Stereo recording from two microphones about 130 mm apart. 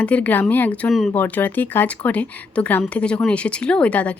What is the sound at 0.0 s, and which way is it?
A woman's voice, 10° left (ahead or behind).